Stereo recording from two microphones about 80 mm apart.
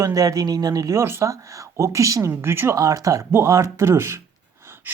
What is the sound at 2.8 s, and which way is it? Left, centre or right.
Speech, right.